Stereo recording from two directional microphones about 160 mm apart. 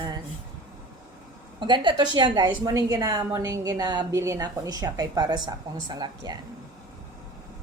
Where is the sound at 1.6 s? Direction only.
30° right (ahead or behind).